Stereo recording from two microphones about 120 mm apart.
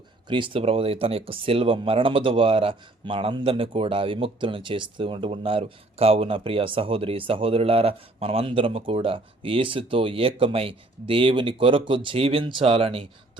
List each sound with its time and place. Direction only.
0.3 s speech: 45° right (ahead or behind)